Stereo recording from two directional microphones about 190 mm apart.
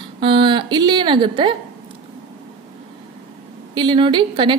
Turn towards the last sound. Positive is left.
turn(degrees=-25)  # may be behind; listen again after turning